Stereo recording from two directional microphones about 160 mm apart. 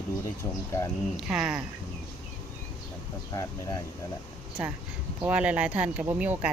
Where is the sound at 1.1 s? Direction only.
5° right (ahead or behind).